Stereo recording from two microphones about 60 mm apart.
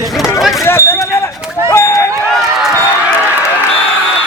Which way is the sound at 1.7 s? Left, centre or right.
Left.